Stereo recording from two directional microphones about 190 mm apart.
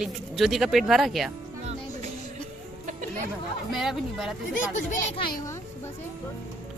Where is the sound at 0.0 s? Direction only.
Centre (ahead or behind).